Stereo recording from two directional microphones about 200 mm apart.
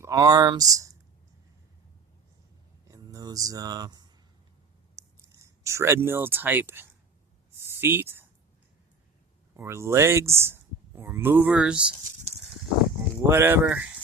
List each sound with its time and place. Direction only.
0.0 s speech: 20° right (ahead or behind)
2.8 s a sound: 15° right (ahead or behind)
9.6 s speech: 15° right (ahead or behind)
13.2 s speech: 10° right (ahead or behind)